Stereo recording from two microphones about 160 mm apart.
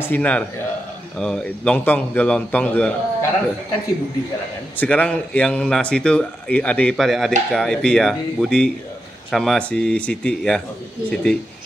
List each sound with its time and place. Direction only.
0.0 s a man's voice: 10° left (ahead or behind)
4.7 s a man's voice: 10° left (ahead or behind)